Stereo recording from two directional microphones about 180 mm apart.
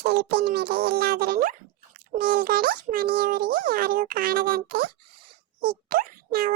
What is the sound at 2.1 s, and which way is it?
A child's voice, 55° right (ahead or behind).